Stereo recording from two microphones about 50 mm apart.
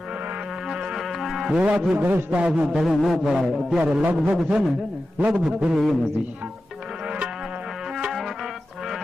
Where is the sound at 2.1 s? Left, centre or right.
Right.